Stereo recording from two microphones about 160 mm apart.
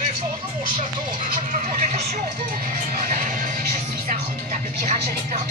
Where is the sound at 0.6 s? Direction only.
55° right (ahead or behind).